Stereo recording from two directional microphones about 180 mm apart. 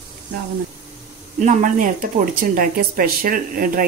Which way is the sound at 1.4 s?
45° right (ahead or behind).